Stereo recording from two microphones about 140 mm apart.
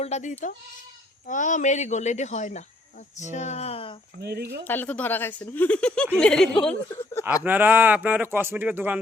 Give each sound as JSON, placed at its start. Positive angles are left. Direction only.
{"t": 0.0, "sound": "speech", "side_deg": 55}
{"t": 4.6, "sound": "speech", "side_deg": 15}
{"t": 6.9, "sound": "speech", "side_deg": 20}
{"t": 7.4, "sound": "speech", "side_deg": -15}